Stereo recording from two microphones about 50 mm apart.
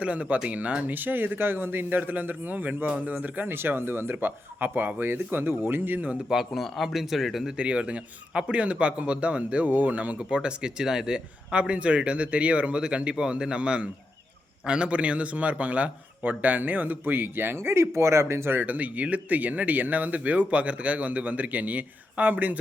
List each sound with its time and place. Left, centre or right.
0.0 s speech: right
3.5 s speech: right
6.2 s speech: centre
7.5 s a man's voice: right
18.5 s speech: right